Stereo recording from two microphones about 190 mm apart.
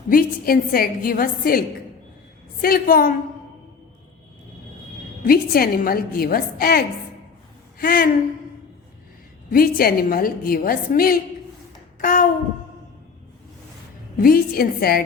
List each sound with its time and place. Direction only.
0.1 s a woman's voice: 50° left (ahead or behind)
5.2 s a woman's voice: 50° left (ahead or behind)
9.5 s a woman's voice: 50° left (ahead or behind)
11.9 s a sound: 45° left (ahead or behind)
14.2 s a woman's voice: 50° left (ahead or behind)